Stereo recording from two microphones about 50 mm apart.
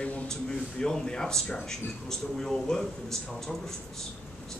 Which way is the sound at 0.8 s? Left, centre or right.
Centre.